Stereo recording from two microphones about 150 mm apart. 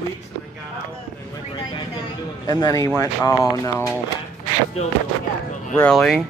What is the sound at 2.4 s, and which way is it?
Speech, 25° left (ahead or behind).